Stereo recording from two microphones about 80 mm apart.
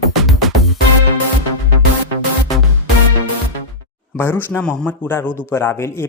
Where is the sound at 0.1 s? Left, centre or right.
Centre.